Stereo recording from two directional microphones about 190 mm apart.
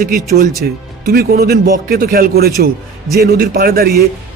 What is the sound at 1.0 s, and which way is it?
Speech, 55° right (ahead or behind).